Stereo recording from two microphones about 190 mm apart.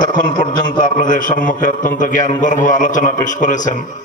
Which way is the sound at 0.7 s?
45° left (ahead or behind).